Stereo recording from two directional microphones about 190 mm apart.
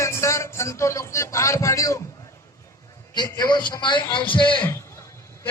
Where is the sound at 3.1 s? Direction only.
20° left (ahead or behind).